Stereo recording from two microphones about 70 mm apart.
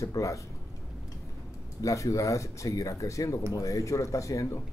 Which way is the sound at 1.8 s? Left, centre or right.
Left.